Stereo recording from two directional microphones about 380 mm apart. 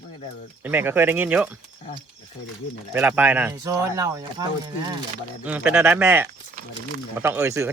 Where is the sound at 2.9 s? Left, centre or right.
Centre.